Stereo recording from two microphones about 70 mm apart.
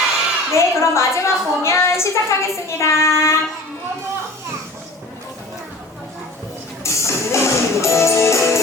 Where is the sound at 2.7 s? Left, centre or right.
Left.